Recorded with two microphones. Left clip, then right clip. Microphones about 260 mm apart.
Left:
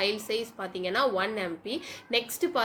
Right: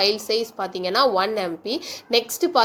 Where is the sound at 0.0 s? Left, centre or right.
Centre.